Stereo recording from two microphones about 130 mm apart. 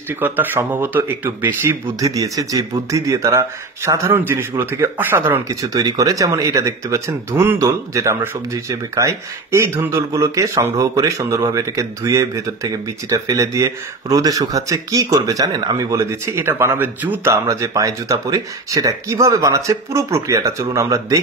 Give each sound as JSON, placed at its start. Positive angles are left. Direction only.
{"t": 0.1, "sound": "speech", "side_deg": -15}
{"t": 5.5, "sound": "speech", "side_deg": -25}
{"t": 17.3, "sound": "speech", "side_deg": -25}